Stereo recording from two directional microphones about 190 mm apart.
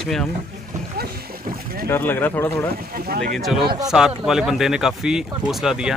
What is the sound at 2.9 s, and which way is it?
Speech, 50° right (ahead or behind).